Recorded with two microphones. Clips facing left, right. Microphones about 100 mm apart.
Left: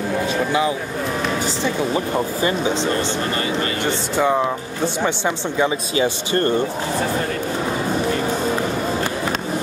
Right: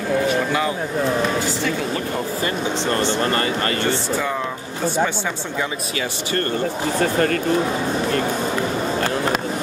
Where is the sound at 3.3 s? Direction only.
45° right (ahead or behind).